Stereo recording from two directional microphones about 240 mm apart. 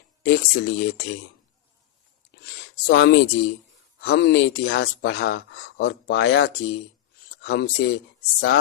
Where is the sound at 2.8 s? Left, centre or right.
Left.